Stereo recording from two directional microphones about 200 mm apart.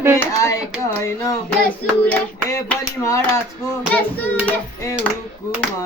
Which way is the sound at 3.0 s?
15° left (ahead or behind).